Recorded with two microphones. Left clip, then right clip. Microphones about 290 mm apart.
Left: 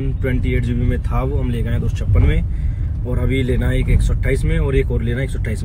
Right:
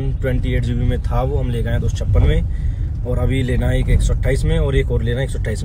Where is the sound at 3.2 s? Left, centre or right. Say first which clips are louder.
Left 2 dB; centre.